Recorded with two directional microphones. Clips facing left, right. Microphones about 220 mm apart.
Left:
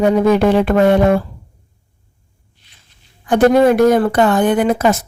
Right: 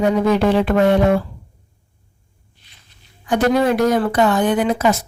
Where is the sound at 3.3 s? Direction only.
50° left (ahead or behind).